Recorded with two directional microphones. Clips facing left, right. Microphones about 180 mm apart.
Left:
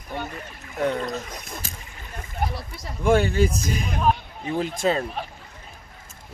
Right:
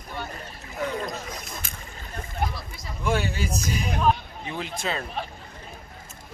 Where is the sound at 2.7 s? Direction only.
60° left (ahead or behind); by 5.0 s 45° left (ahead or behind).